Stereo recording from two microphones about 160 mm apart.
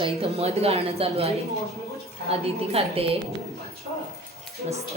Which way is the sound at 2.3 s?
40° right (ahead or behind).